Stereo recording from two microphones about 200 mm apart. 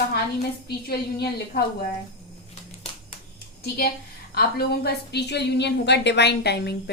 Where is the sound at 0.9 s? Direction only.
50° left (ahead or behind).